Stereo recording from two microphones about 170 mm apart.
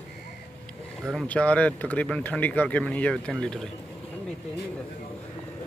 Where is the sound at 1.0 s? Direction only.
5° left (ahead or behind).